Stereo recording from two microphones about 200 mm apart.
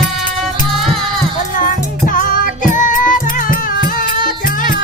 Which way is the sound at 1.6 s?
45° left (ahead or behind).